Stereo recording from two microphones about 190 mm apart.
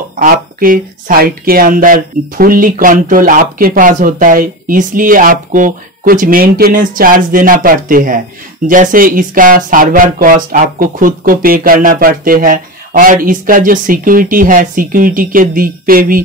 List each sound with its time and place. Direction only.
0.1 s speech: 45° right (ahead or behind)